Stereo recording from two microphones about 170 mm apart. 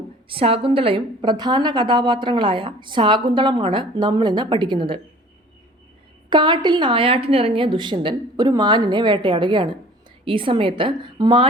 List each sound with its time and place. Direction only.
0.3 s a woman's voice: 35° right (ahead or behind)
6.3 s a woman's voice: 25° right (ahead or behind)